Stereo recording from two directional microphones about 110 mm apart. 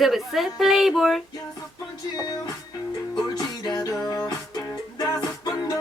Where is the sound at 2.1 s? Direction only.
40° left (ahead or behind).